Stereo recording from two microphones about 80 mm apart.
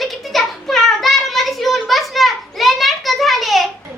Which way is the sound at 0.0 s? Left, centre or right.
Centre.